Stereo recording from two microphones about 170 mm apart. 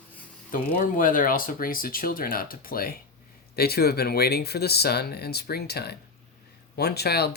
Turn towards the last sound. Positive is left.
turn(degrees=70)  # may be behind; listen again after turning